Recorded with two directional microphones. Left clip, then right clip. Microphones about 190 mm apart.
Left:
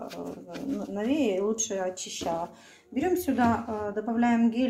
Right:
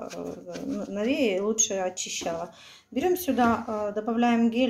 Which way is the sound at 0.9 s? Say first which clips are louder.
Right 2 dB; 20° right (ahead or behind).